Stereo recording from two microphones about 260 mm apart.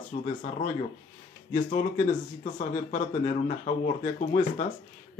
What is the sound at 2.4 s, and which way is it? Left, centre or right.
Speech, left.